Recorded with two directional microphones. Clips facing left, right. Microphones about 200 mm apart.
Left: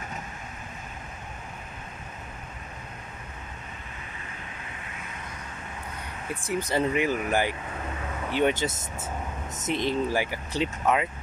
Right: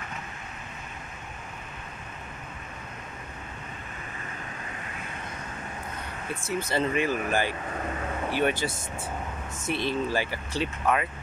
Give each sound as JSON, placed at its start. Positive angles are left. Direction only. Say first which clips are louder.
{"t": 6.4, "sound": "speech", "louder": "left 2 dB", "side_deg": 15}